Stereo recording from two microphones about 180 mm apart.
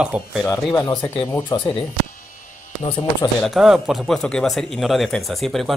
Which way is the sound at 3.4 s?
Centre (ahead or behind).